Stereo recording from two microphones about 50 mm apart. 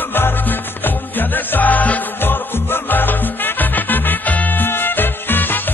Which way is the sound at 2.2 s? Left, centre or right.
Left.